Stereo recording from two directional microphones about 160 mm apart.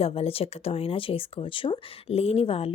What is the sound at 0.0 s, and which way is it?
Speech, 35° left (ahead or behind).